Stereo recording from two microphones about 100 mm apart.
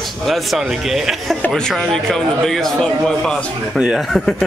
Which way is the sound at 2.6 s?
5° left (ahead or behind).